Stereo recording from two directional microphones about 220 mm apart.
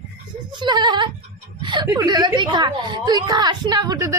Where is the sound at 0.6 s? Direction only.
20° right (ahead or behind).